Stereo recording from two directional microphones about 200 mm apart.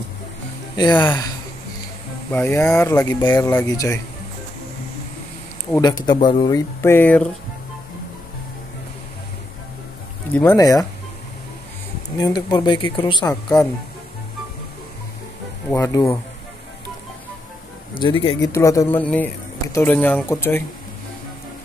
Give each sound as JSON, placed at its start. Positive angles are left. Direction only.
{"t": 0.7, "sound": "speech", "side_deg": 20}
{"t": 2.3, "sound": "speech", "side_deg": 15}
{"t": 5.8, "sound": "speech", "side_deg": 20}
{"t": 10.3, "sound": "speech", "side_deg": 15}
{"t": 12.2, "sound": "speech", "side_deg": 20}
{"t": 15.7, "sound": "speech", "side_deg": 15}
{"t": 17.9, "sound": "speech", "side_deg": 25}